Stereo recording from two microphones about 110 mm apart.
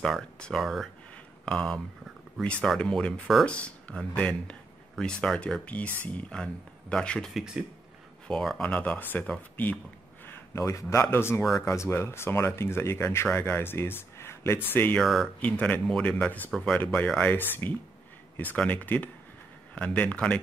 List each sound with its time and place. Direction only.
0.0 s speech: 5° left (ahead or behind)
10.2 s a sound: 20° left (ahead or behind)
10.6 s speech: 30° left (ahead or behind)
15.0 s speech: centre (ahead or behind)
15.4 s speech: 15° left (ahead or behind)